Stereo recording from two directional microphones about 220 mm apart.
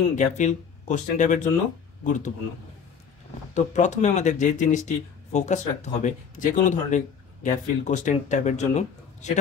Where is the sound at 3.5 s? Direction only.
35° left (ahead or behind).